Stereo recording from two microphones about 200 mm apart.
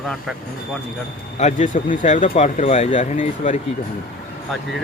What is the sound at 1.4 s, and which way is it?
Speech, 35° left (ahead or behind).